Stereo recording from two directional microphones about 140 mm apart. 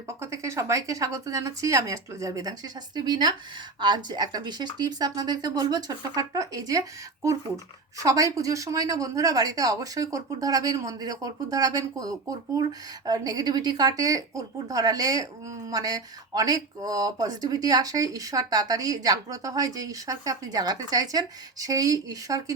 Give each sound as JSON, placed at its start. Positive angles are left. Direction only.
{"t": 0.2, "sound": "a woman's voice", "side_deg": -20}